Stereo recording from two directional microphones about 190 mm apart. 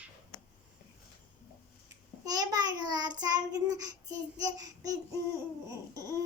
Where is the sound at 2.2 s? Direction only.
20° right (ahead or behind).